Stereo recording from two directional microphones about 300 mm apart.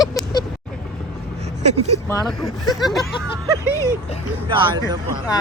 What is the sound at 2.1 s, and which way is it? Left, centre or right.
Speech, centre.